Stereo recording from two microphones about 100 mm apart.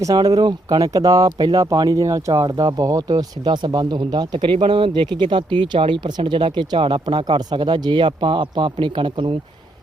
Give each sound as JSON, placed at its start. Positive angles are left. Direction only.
{"t": 0.0, "sound": "speech", "side_deg": -40}
{"t": 4.5, "sound": "speech", "side_deg": -65}